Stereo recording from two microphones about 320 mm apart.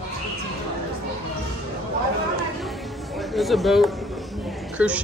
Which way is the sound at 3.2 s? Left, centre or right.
Centre.